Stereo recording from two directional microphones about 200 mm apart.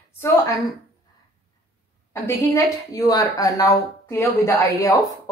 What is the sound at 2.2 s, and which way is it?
A woman's voice, 15° left (ahead or behind).